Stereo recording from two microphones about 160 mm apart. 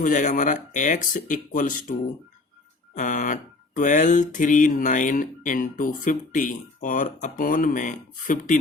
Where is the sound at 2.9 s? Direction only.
55° left (ahead or behind).